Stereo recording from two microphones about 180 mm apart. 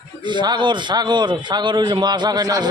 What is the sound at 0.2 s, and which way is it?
A man's voice, 25° right (ahead or behind).